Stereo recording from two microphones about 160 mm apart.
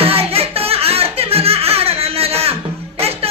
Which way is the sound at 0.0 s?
35° right (ahead or behind).